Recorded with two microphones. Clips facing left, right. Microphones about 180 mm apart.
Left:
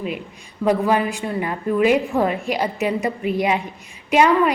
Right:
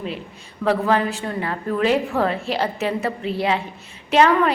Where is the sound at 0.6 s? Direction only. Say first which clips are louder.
Left 1 dB; 15° left (ahead or behind).